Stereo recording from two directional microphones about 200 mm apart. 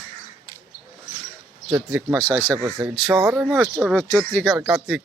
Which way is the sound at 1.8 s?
5° right (ahead or behind).